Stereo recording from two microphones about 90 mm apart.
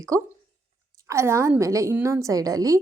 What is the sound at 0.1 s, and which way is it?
Speech, 35° right (ahead or behind).